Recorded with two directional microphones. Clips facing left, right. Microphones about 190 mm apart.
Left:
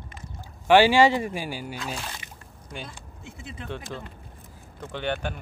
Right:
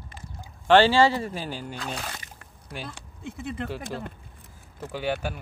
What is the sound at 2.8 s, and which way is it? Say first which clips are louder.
Speech: right 4 dB; 60° right (ahead or behind).